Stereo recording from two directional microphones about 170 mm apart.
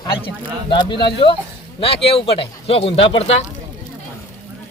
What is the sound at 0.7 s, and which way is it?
Speech, 30° left (ahead or behind).